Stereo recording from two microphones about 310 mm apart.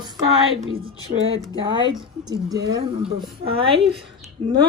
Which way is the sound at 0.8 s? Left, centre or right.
Right.